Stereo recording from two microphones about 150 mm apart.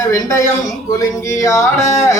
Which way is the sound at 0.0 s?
20° left (ahead or behind).